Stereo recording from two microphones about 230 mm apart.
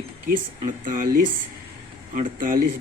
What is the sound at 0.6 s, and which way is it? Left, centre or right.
Speech, right.